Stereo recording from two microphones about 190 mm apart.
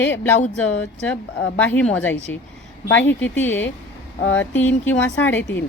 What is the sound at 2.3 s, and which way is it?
Speech, 65° left (ahead or behind).